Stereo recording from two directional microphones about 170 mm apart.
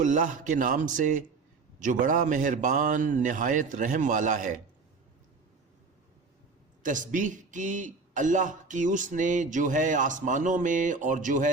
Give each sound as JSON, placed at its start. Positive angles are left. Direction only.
{"t": 0.0, "sound": "a man's voice", "side_deg": -50}
{"t": 6.8, "sound": "a man's voice", "side_deg": -50}